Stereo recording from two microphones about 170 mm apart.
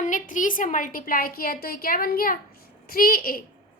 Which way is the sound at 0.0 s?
50° left (ahead or behind).